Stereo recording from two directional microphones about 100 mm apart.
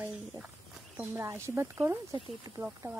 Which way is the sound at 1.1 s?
25° right (ahead or behind).